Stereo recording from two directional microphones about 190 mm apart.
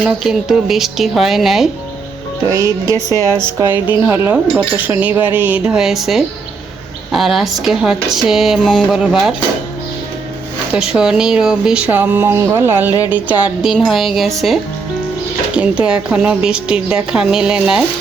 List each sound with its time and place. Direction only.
0.0 s a woman's voice: centre (ahead or behind)
2.9 s a woman's voice: 15° right (ahead or behind)
10.7 s a woman's voice: 5° right (ahead or behind)